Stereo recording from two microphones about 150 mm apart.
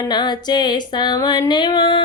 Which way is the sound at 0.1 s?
30° left (ahead or behind).